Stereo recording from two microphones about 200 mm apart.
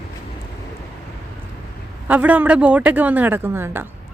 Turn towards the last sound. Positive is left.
turn(degrees=-10)  # may be behind; listen again after turning